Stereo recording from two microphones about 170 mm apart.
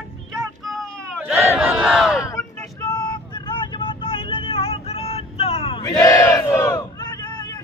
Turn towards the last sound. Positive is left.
turn(degrees=20)  # may be behind; listen again after turning